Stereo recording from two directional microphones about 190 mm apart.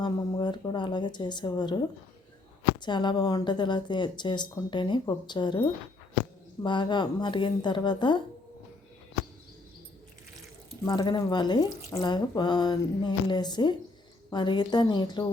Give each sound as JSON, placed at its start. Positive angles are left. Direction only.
{"t": 0.0, "sound": "speech", "side_deg": 20}
{"t": 2.8, "sound": "speech", "side_deg": 25}
{"t": 10.8, "sound": "speech", "side_deg": 20}